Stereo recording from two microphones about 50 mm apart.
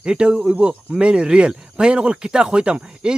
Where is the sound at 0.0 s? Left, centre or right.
Centre.